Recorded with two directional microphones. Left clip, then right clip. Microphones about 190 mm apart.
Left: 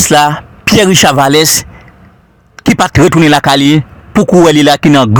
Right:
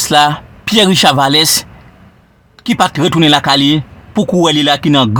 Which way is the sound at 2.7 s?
25° left (ahead or behind).